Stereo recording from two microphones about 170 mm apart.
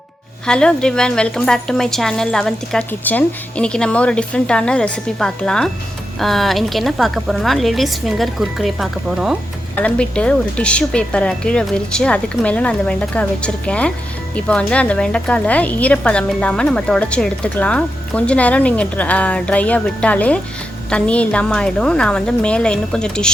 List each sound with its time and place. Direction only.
0.4 s a woman's voice: 5° left (ahead or behind)
9.7 s a woman's voice: 5° left (ahead or behind)